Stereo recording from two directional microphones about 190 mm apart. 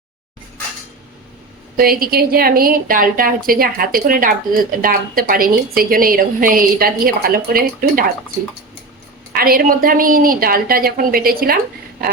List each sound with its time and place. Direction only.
1.7 s a woman's voice: 50° right (ahead or behind)
9.3 s a woman's voice: 50° right (ahead or behind)